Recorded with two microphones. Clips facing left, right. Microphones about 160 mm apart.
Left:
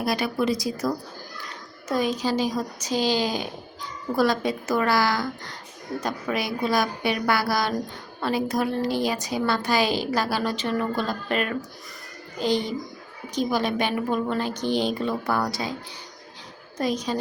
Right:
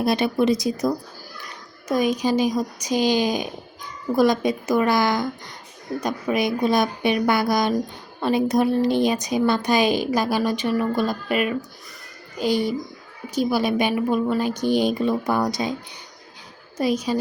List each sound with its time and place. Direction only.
0.0 s a woman's voice: 25° right (ahead or behind)
16.7 s a woman's voice: 10° right (ahead or behind)